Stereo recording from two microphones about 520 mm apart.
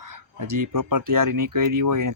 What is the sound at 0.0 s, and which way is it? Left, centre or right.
Speech, right.